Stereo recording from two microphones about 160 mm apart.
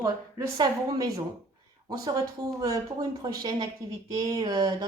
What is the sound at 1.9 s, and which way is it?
A woman's voice, 25° right (ahead or behind).